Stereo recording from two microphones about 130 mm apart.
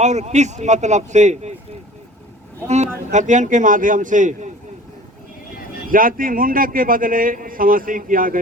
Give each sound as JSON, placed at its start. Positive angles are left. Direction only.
{"t": 0.0, "sound": "speech", "side_deg": -60}
{"t": 2.6, "sound": "a man's voice", "side_deg": -60}
{"t": 5.9, "sound": "a man's voice", "side_deg": -90}